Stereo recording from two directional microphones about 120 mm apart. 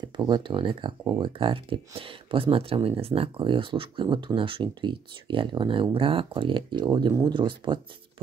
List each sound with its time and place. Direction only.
0.2 s speech: 40° right (ahead or behind)
1.4 s speech: 50° right (ahead or behind)